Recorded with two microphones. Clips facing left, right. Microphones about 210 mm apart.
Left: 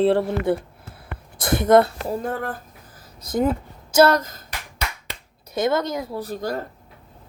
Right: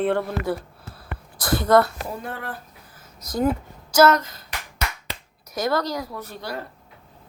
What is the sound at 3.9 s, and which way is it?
Speech, 30° left (ahead or behind).